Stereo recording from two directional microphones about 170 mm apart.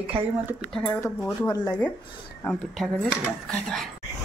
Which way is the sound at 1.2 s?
20° left (ahead or behind).